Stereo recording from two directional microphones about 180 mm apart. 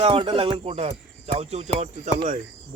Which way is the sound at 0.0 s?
30° right (ahead or behind).